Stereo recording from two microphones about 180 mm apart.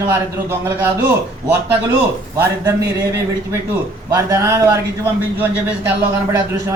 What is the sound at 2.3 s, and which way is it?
A man's voice, 15° right (ahead or behind).